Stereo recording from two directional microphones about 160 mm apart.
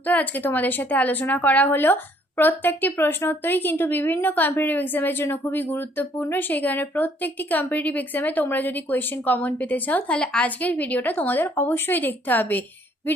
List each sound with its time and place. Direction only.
0.0 s speech: 10° left (ahead or behind)